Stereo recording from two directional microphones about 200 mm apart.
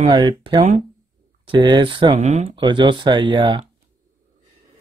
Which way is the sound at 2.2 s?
40° right (ahead or behind).